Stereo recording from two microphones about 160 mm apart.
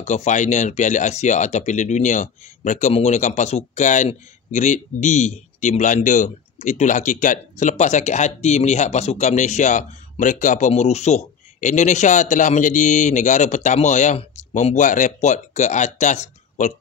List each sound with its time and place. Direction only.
0.0 s speech: 45° left (ahead or behind)